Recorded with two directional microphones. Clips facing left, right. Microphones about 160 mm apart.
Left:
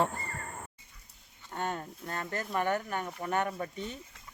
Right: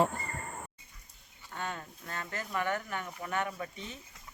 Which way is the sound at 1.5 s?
45° left (ahead or behind).